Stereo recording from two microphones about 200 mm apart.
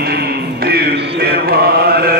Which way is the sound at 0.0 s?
55° right (ahead or behind).